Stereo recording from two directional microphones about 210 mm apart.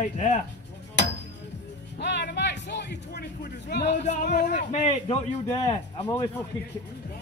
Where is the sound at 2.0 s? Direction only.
50° left (ahead or behind).